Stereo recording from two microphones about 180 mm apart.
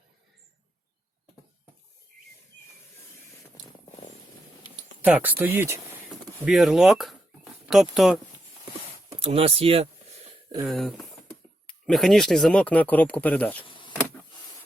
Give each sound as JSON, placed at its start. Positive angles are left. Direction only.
{"t": 5.0, "sound": "speech", "side_deg": -10}
{"t": 9.2, "sound": "speech", "side_deg": -35}
{"t": 10.7, "sound": "speech", "side_deg": 0}
{"t": 13.7, "sound": "power windows", "side_deg": 25}